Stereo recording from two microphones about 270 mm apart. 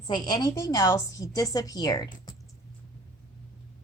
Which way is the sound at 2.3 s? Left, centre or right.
Centre.